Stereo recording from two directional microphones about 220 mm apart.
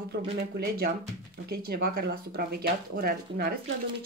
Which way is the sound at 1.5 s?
45° right (ahead or behind).